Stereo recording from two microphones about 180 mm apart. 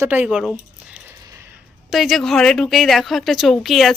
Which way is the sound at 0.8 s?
10° right (ahead or behind).